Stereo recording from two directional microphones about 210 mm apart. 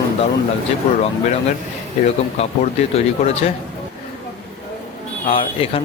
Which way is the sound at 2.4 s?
30° left (ahead or behind).